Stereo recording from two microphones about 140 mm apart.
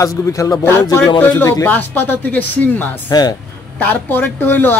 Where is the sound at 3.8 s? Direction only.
10° left (ahead or behind).